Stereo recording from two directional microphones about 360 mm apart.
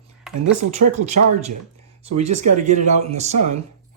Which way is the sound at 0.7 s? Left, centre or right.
Centre.